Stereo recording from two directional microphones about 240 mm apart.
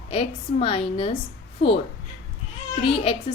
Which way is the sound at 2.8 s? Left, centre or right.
Left.